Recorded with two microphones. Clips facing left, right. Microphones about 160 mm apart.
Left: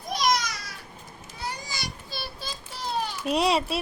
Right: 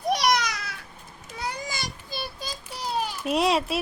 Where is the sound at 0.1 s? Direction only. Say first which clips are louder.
Right 2 dB; 65° right (ahead or behind).